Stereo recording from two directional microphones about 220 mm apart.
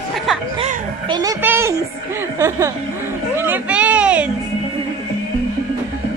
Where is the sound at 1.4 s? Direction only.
10° right (ahead or behind).